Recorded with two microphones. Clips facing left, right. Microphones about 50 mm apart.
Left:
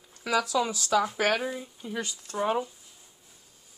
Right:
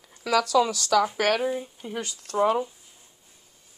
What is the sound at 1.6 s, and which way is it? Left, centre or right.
Speech, right.